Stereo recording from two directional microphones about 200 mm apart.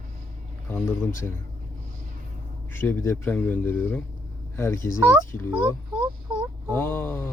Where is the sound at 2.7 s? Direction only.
10° left (ahead or behind).